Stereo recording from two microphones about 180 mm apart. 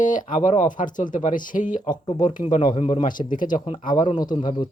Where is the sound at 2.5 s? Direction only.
30° left (ahead or behind).